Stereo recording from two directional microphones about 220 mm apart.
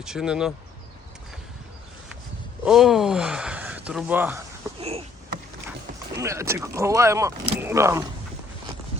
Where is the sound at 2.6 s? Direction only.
Centre (ahead or behind).